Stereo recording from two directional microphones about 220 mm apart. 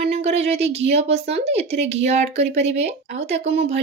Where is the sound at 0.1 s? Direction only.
30° right (ahead or behind).